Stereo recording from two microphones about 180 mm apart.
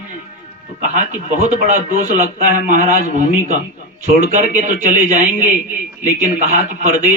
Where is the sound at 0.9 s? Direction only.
40° right (ahead or behind).